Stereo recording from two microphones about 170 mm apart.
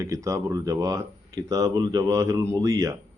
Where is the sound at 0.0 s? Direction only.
20° right (ahead or behind).